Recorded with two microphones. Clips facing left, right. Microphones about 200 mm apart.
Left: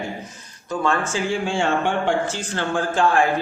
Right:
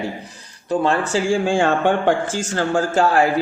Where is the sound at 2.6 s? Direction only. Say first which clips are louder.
Right 3 dB; 40° right (ahead or behind).